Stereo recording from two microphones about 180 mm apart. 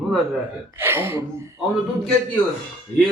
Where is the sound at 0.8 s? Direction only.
10° right (ahead or behind).